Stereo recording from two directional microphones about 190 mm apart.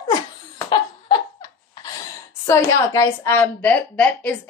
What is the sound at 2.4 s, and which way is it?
A woman's voice, 15° left (ahead or behind).